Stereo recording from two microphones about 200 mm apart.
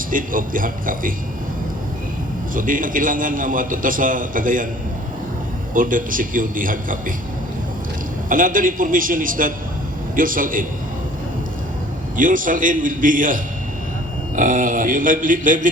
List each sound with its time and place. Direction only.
0.1 s a man's voice: 45° right (ahead or behind)
2.6 s a man's voice: 45° right (ahead or behind)
5.7 s a man's voice: 45° right (ahead or behind)
8.3 s a man's voice: 40° right (ahead or behind)
12.1 s speech: 40° right (ahead or behind)